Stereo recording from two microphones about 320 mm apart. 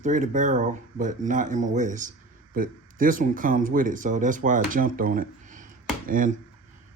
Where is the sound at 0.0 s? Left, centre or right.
Right.